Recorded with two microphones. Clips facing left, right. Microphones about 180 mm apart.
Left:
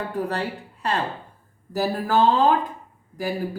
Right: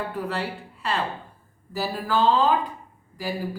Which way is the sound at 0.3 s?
45° left (ahead or behind).